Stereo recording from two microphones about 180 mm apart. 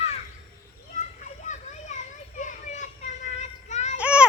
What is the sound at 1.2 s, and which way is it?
Children playing, 40° left (ahead or behind).